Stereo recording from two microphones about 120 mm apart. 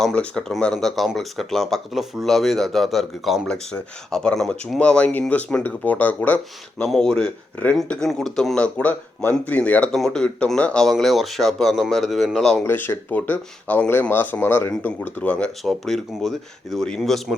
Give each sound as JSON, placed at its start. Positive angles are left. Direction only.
{"t": 0.0, "sound": "speech", "side_deg": 10}
{"t": 6.8, "sound": "speech", "side_deg": 5}
{"t": 12.6, "sound": "speech", "side_deg": 15}